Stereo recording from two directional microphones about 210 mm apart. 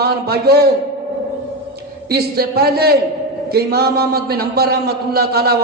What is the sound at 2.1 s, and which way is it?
A man's voice, 50° right (ahead or behind).